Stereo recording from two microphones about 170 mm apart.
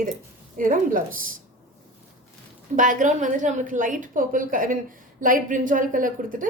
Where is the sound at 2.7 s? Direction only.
50° right (ahead or behind).